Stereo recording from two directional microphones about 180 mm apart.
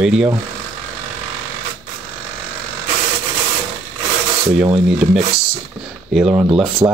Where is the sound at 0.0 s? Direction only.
5° right (ahead or behind).